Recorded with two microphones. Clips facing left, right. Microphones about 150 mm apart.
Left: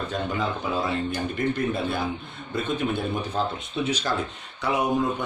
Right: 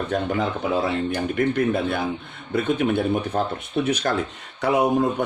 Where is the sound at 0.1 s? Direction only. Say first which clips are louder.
Right 5 dB; 60° right (ahead or behind).